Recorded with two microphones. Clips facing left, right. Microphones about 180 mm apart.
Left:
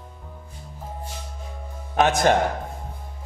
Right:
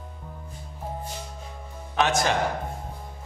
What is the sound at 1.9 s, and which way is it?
Speech, 50° left (ahead or behind).